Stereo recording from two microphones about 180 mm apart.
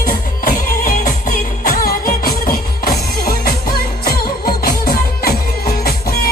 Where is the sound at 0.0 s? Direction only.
45° left (ahead or behind).